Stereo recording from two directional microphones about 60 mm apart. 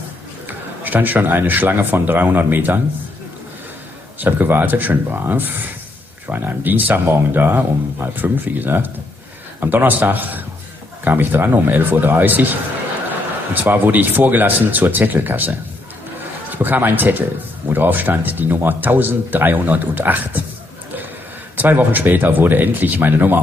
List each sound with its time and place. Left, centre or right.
0.5 s speech: right
4.2 s speech: right
13.5 s speech: right
16.5 s speech: right
21.5 s speech: right